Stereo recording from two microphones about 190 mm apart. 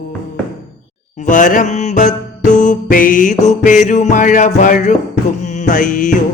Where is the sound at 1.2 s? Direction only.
40° left (ahead or behind).